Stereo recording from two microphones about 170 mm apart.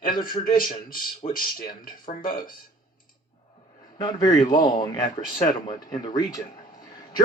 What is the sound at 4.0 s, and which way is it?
Speech, 25° left (ahead or behind).